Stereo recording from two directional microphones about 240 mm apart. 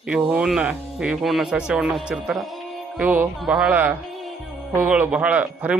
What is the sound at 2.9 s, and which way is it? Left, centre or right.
Music, centre.